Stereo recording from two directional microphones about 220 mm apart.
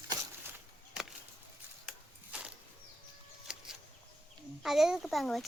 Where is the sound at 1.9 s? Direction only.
5° right (ahead or behind).